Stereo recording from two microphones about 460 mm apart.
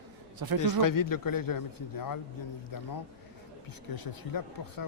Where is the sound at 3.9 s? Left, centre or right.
Left.